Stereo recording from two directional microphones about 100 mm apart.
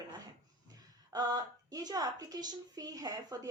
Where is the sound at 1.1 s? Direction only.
40° right (ahead or behind).